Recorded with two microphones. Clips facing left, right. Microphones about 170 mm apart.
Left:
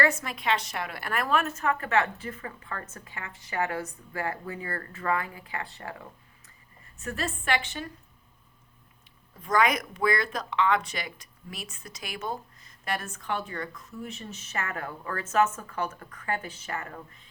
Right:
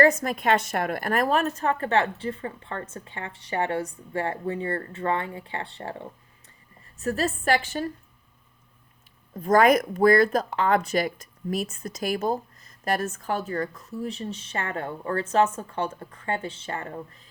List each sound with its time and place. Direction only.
0.0 s speech: 40° right (ahead or behind)
9.3 s speech: 45° right (ahead or behind); by 17.0 s 30° right (ahead or behind)